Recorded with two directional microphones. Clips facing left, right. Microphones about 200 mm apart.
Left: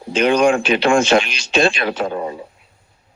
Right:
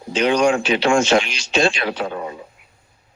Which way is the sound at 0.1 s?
55° left (ahead or behind).